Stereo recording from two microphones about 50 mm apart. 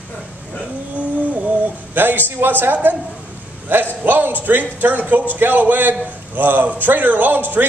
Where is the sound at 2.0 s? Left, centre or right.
Right.